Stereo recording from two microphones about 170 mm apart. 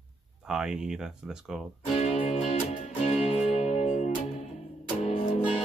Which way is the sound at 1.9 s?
40° left (ahead or behind).